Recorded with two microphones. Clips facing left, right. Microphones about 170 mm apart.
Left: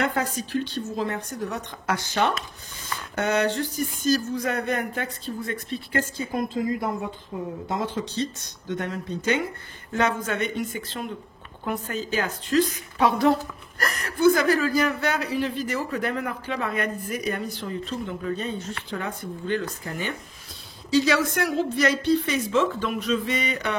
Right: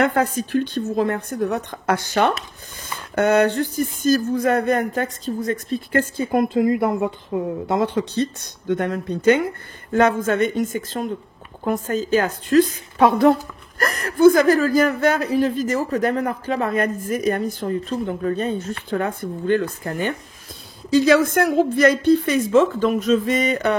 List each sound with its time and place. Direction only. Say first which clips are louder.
0.0 s speech: right 7 dB; 55° right (ahead or behind)